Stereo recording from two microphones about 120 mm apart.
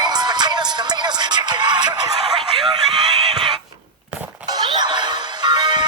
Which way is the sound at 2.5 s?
45° right (ahead or behind).